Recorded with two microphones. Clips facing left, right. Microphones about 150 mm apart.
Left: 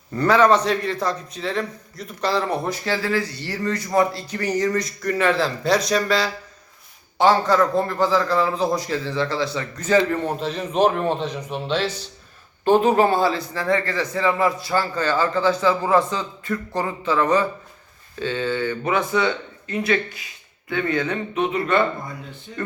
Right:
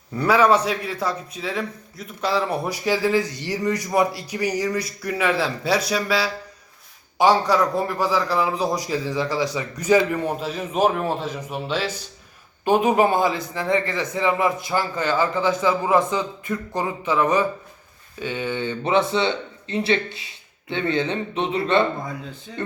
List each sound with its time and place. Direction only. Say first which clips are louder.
0.1 s a man's voice: left 1 dB; 5° right (ahead or behind); by 21.8 s 30° right (ahead or behind)